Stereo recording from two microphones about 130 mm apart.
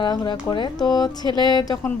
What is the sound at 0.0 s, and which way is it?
A woman's voice, 35° left (ahead or behind).